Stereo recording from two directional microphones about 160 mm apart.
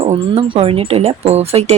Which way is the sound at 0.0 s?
35° right (ahead or behind).